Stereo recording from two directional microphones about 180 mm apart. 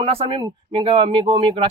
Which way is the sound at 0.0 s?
30° right (ahead or behind).